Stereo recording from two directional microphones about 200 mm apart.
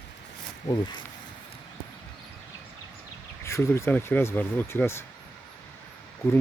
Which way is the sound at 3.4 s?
15° left (ahead or behind).